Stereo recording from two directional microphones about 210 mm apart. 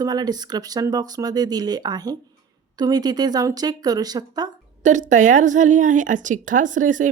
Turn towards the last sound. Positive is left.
turn(degrees=-40)  # may be behind; listen again after turning